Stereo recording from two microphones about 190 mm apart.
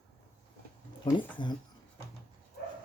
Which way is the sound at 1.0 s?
25° left (ahead or behind).